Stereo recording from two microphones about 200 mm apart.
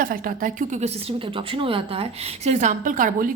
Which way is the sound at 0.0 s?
45° right (ahead or behind).